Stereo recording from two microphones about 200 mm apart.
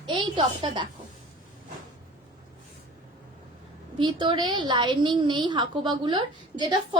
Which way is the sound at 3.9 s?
25° right (ahead or behind).